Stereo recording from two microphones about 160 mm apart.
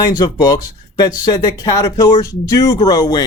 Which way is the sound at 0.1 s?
25° left (ahead or behind).